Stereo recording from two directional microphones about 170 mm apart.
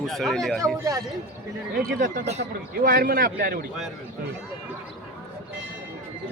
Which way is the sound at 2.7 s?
60° right (ahead or behind).